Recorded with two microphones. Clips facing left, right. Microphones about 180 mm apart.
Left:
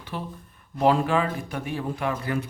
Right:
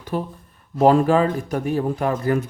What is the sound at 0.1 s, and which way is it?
A man's voice, 45° right (ahead or behind).